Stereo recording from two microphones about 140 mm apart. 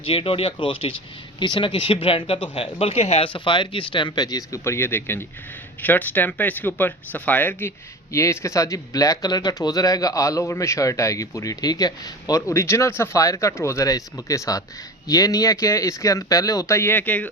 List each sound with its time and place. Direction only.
0.0 s speech: 40° left (ahead or behind); by 17.2 s 10° left (ahead or behind)